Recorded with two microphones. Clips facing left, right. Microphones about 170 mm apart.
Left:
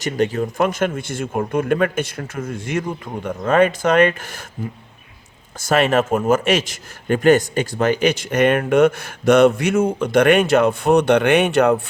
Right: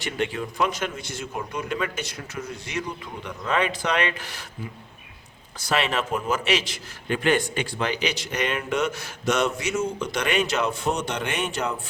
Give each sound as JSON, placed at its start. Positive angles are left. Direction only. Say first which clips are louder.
{"t": 0.0, "sound": "a man's voice", "louder": "left 8 dB", "side_deg": 40}
{"t": 5.5, "sound": "a man's voice", "louder": "left 9 dB", "side_deg": 50}